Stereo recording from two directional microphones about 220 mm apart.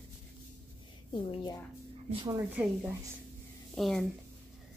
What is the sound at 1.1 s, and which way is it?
Speech, 20° left (ahead or behind).